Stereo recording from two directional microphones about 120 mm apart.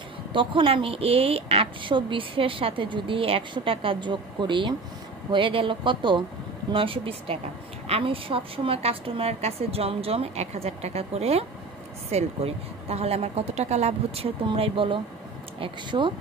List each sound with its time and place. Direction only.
0.3 s a woman's voice: 45° right (ahead or behind)